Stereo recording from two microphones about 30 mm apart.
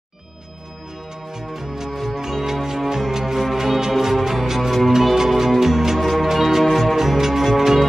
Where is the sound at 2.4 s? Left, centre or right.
Centre.